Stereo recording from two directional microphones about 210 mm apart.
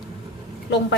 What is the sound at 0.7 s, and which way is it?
Speech, 55° left (ahead or behind).